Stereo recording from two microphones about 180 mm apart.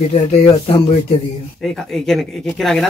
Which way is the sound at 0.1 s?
35° left (ahead or behind).